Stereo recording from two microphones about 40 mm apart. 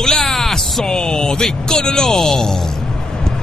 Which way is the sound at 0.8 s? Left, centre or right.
Centre.